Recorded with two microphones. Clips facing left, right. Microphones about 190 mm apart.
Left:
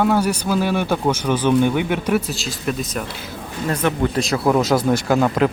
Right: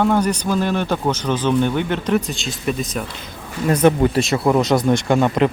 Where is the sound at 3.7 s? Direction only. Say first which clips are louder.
Right 6 dB; 20° right (ahead or behind).